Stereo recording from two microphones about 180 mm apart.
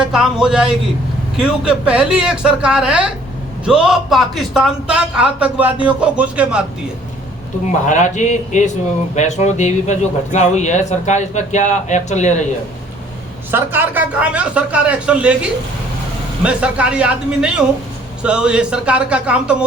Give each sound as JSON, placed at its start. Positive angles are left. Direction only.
{"t": 0.0, "sound": "a man's voice", "side_deg": -5}
{"t": 7.9, "sound": "a man's voice", "side_deg": 45}
{"t": 13.5, "sound": "a man's voice", "side_deg": -10}